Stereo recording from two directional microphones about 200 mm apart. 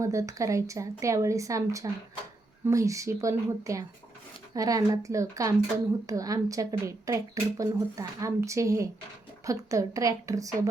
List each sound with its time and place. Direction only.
0.0 s speech: 15° right (ahead or behind)